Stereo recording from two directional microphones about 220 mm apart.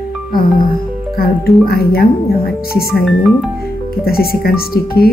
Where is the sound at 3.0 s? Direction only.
Centre (ahead or behind).